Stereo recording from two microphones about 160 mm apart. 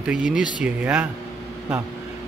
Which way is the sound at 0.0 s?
5° right (ahead or behind).